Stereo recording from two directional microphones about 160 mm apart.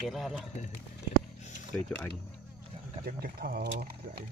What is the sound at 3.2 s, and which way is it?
Speech, 75° right (ahead or behind).